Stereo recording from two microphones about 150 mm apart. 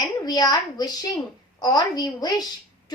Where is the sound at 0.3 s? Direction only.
25° left (ahead or behind).